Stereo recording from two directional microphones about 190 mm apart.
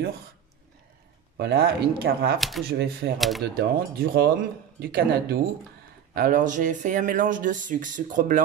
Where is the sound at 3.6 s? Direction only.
55° right (ahead or behind).